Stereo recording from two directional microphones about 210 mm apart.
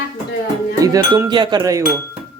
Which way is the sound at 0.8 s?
15° right (ahead or behind).